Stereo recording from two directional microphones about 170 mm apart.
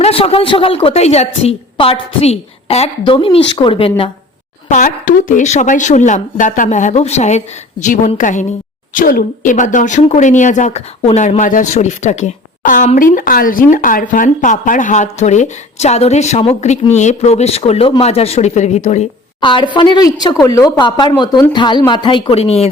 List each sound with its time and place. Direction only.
0.0 s a woman's voice: 35° left (ahead or behind)
4.7 s speech: 50° left (ahead or behind)
19.4 s speech: 30° left (ahead or behind)